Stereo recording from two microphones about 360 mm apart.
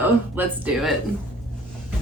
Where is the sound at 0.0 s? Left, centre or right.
Centre.